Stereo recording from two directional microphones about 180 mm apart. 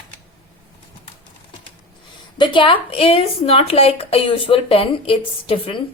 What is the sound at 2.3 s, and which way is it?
Speech, 25° left (ahead or behind).